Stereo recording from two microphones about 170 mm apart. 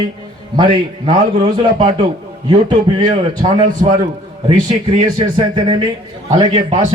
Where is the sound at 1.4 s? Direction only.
30° right (ahead or behind).